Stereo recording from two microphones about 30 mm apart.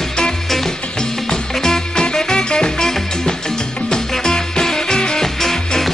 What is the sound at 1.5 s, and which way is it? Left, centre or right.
Music, centre.